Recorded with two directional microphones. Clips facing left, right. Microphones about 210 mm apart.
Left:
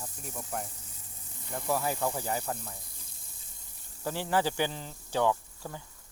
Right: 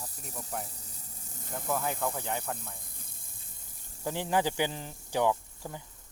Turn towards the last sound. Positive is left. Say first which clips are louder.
# even
turn(degrees=-15)  # may be behind; listen again after turning